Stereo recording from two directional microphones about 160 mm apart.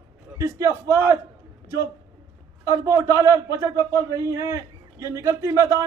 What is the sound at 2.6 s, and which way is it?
A man's voice, 20° right (ahead or behind).